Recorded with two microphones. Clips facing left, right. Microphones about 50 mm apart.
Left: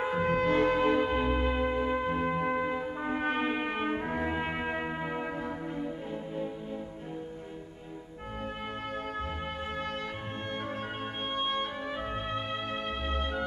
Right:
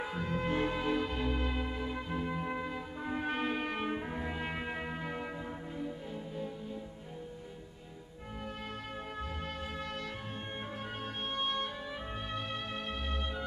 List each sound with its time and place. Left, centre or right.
0.2 s music: left
0.9 s music: left
2.4 s music: left
2.7 s brass instrument: left
3.3 s music: left
3.8 s brass instrument: left
4.3 s music: left
11.3 s music: left